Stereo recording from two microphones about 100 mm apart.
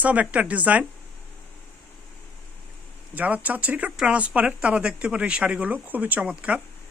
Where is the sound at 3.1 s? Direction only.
15° right (ahead or behind).